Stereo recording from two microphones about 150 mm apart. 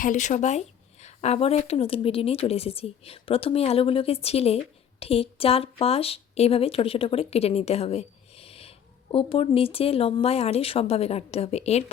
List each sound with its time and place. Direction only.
0.0 s a woman's voice: 55° left (ahead or behind)